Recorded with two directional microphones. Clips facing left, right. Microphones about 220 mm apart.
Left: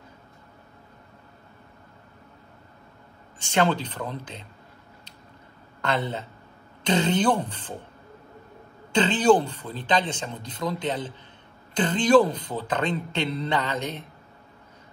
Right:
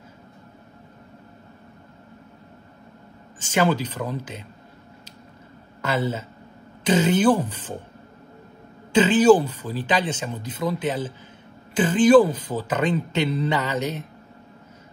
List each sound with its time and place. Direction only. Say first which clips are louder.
3.3 s a man's voice: right 2 dB; 5° right (ahead or behind)
5.8 s a man's voice: right 3 dB; 5° right (ahead or behind)
8.9 s a man's voice: right 4 dB; 5° right (ahead or behind)